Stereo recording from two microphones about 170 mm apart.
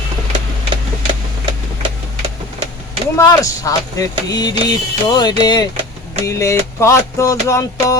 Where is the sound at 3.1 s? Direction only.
20° left (ahead or behind).